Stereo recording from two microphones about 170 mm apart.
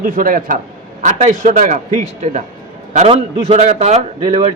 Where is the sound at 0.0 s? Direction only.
55° right (ahead or behind).